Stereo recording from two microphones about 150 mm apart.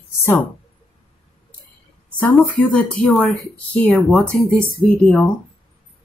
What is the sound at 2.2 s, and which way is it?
Speech, 10° left (ahead or behind).